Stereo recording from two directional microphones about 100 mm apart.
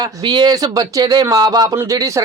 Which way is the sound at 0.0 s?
45° right (ahead or behind).